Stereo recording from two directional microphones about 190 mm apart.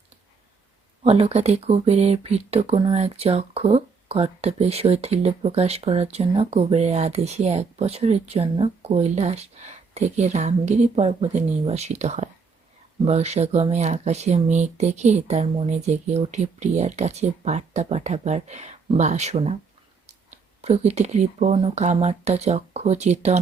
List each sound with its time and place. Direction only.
1.0 s speech: 30° right (ahead or behind)